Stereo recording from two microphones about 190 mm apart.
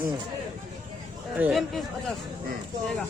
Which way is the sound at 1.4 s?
5° right (ahead or behind).